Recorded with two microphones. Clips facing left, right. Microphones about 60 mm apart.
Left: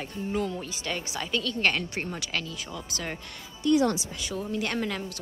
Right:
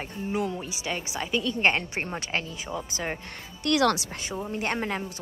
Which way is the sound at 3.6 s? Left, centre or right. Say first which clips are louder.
Even; right.